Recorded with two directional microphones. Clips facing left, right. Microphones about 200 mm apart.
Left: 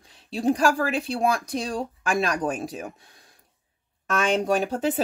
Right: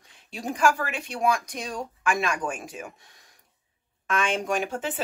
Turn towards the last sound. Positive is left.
turn(degrees=35)  # may be behind; listen again after turning